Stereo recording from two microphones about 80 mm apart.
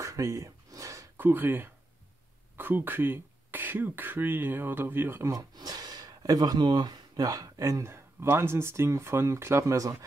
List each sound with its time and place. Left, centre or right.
0.0 s a sound: right
1.1 s speech: right
5.3 s speech: right
7.9 s speech: right